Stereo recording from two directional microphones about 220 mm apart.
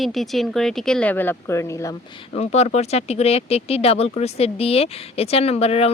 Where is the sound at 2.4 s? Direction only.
30° left (ahead or behind).